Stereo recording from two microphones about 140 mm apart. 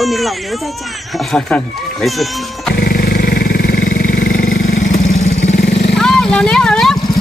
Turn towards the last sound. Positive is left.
turn(degrees=5)  # may be behind; listen again after turning